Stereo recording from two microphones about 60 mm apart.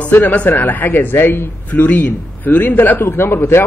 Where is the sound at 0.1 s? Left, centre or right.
Left.